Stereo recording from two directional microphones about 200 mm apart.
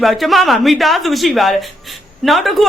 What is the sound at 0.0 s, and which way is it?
A man's voice, centre (ahead or behind).